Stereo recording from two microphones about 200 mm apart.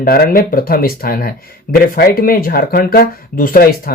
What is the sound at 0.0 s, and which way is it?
Speech, 50° left (ahead or behind).